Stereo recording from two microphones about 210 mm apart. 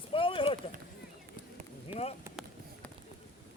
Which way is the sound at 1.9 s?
30° left (ahead or behind).